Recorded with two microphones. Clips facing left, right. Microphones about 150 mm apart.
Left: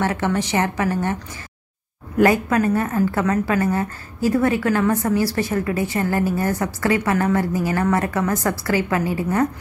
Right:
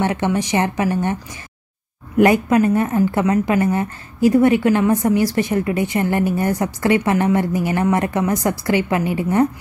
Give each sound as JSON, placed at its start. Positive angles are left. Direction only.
{"t": 0.0, "sound": "a woman's voice", "side_deg": -20}
{"t": 2.1, "sound": "a woman's voice", "side_deg": -20}